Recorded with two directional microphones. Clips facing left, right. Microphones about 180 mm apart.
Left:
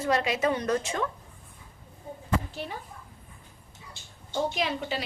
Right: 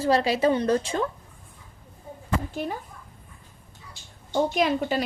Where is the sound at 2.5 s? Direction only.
45° right (ahead or behind).